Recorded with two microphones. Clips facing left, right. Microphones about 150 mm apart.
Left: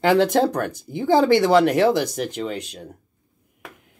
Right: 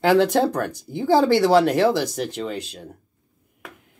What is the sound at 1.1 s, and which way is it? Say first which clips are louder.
Speech: even; 15° left (ahead or behind).